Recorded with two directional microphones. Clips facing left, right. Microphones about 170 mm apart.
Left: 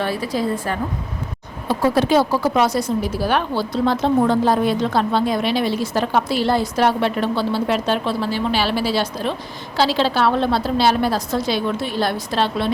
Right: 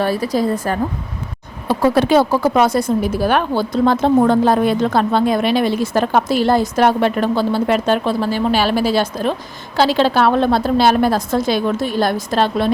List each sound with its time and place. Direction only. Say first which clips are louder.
0.0 s a woman's voice: right 4 dB; 40° right (ahead or behind)
1.6 s a woman's voice: right 3 dB; 60° right (ahead or behind)